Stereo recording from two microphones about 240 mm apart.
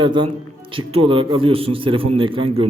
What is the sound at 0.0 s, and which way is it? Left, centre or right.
A man's voice, centre.